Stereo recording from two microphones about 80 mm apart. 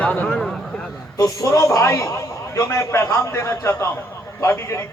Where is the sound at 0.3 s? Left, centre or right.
Centre.